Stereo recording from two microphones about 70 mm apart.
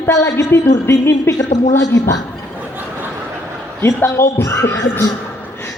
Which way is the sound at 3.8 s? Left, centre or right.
Left.